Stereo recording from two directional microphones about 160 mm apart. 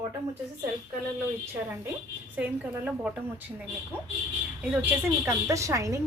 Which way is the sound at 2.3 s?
10° right (ahead or behind).